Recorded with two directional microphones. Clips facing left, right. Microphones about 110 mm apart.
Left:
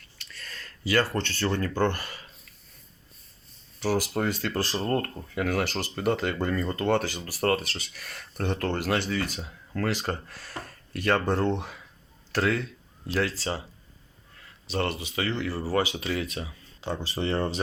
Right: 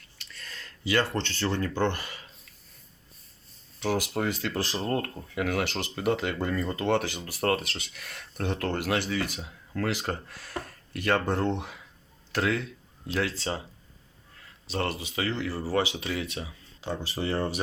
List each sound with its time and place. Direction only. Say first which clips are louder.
0.2 s speech: left 1 dB; 20° right (ahead or behind)
3.8 s speech: left 2 dB; 20° right (ahead or behind)
14.7 s speech: left 2 dB; 30° right (ahead or behind)
15.5 s speech: left 1 dB; 20° right (ahead or behind)